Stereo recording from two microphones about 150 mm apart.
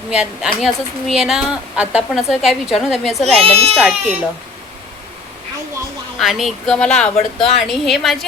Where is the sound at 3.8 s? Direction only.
5° right (ahead or behind).